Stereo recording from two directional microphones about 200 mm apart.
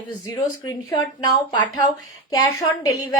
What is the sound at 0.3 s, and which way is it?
A woman's voice, 15° left (ahead or behind).